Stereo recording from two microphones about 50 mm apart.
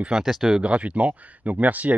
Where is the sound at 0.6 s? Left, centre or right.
Right.